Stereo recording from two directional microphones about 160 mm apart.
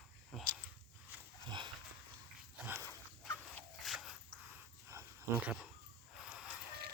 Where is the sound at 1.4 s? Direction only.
30° right (ahead or behind).